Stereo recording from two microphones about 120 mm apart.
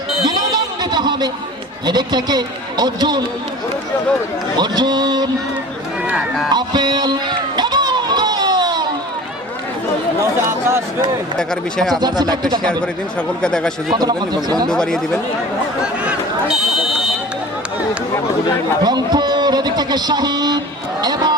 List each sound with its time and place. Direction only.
0.3 s a sound: 35° right (ahead or behind)
1.9 s a man's voice: 35° right (ahead or behind)
4.5 s a man's voice: 35° right (ahead or behind)
6.1 s speech: 5° right (ahead or behind)
6.5 s music: 35° right (ahead or behind)
10.4 s speech: 20° right (ahead or behind)
11.3 s speech: 5° left (ahead or behind)
11.9 s a man's voice: 35° right (ahead or behind)
13.4 s speech: 5° left (ahead or behind)
13.9 s a man's voice: 35° right (ahead or behind)
14.7 s speech: 5° left (ahead or behind)
15.8 s a sound: 5° right (ahead or behind)
18.8 s a man's voice: 35° right (ahead or behind)